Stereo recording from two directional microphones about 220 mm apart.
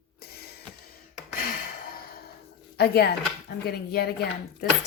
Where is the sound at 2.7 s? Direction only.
45° left (ahead or behind).